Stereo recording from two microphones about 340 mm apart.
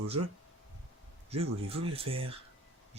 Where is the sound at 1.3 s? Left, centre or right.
Centre.